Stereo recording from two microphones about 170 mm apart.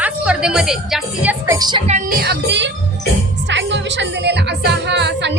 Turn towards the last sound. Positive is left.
turn(degrees=-90)